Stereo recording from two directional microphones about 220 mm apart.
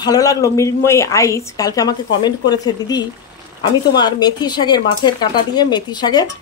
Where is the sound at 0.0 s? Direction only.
15° left (ahead or behind).